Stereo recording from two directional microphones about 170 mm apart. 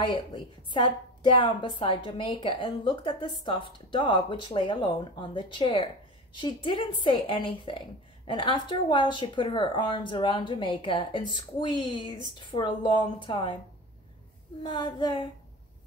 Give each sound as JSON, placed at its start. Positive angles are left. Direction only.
{"t": 0.0, "sound": "a woman's voice", "side_deg": 30}
{"t": 14.6, "sound": "a woman's voice", "side_deg": 25}